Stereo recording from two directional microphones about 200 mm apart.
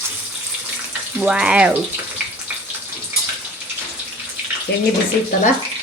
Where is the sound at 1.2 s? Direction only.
5° right (ahead or behind).